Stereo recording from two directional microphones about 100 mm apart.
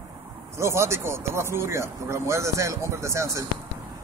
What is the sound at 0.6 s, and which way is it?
Speech, 25° right (ahead or behind).